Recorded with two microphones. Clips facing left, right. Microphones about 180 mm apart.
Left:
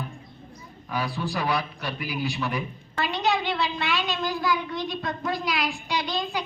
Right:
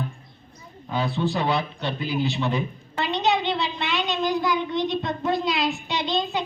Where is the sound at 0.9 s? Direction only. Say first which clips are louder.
Right 4 dB; 25° right (ahead or behind).